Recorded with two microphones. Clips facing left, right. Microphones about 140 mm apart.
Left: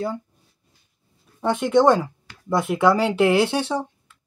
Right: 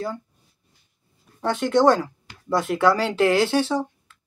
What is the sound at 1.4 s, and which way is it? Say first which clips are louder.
Speech: left 1 dB; 5° left (ahead or behind).